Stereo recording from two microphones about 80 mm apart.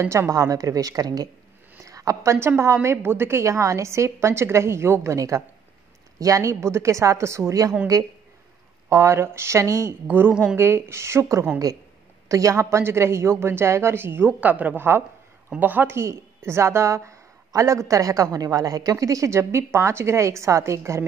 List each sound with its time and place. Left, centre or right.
0.0 s a woman's voice: right
1.9 s a sound: right
2.3 s a woman's voice: right
8.8 s a woman's voice: right
10.0 s a woman's voice: right
16.0 s a woman's voice: right